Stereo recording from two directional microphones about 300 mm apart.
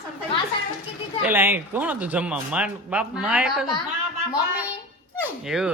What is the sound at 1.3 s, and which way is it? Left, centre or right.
Speech, centre.